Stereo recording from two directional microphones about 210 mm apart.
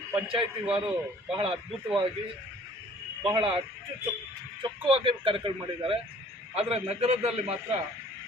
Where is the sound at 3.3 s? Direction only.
25° right (ahead or behind).